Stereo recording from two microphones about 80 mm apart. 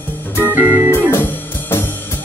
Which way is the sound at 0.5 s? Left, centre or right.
Right.